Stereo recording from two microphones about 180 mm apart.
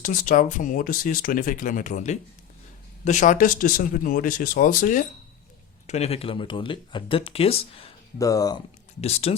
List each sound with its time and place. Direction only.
0.0 s speech: 50° left (ahead or behind)
5.9 s speech: 35° left (ahead or behind)
8.2 s speech: 20° left (ahead or behind)
9.0 s speech: 35° left (ahead or behind)